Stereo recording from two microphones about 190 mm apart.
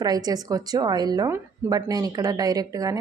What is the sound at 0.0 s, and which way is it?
A woman's voice, 20° right (ahead or behind).